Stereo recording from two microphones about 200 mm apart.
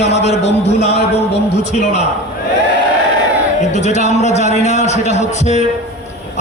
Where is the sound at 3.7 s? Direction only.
35° left (ahead or behind).